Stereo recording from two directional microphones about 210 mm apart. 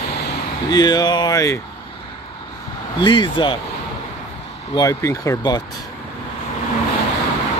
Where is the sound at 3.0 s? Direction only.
20° left (ahead or behind).